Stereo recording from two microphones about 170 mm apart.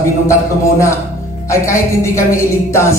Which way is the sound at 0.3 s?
15° left (ahead or behind).